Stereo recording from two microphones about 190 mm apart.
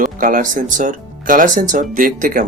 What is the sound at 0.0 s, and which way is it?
Speech, 45° right (ahead or behind).